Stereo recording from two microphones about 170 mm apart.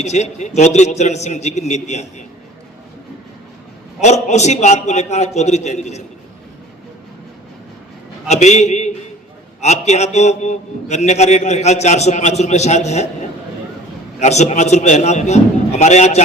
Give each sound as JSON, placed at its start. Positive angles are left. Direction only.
{"t": 0.0, "sound": "a man's voice", "side_deg": 40}
{"t": 4.0, "sound": "a man's voice", "side_deg": 40}
{"t": 8.3, "sound": "a man's voice", "side_deg": 40}
{"t": 14.2, "sound": "a man's voice", "side_deg": 40}